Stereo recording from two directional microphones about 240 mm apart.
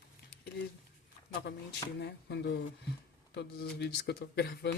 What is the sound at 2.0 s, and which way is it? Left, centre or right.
Speech, left.